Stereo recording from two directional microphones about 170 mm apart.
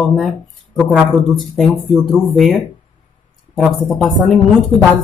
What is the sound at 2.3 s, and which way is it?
Speech, centre (ahead or behind).